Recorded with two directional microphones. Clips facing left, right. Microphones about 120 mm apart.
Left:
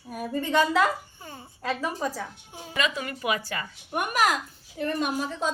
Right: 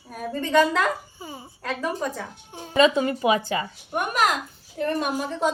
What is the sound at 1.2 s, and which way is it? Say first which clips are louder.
Speech: right 2 dB; 5° right (ahead or behind).